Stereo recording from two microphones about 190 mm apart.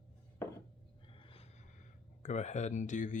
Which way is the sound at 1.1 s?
30° left (ahead or behind).